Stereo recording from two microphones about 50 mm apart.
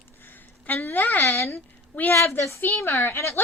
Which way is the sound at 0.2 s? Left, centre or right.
Left.